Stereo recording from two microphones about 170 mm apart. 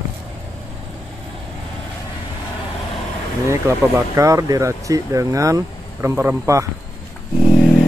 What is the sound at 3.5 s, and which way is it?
Speech, 15° right (ahead or behind).